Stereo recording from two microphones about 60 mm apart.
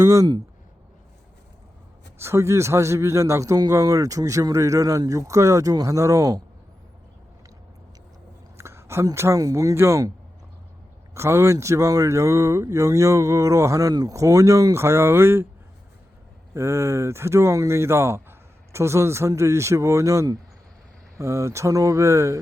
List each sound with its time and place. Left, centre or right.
0.0 s speech: right
2.1 s speech: right
3.5 s speech: right
8.5 s a sound: right
9.1 s speech: right
9.4 s speech: right
9.7 s speech: right
11.1 s speech: right
16.6 s speech: right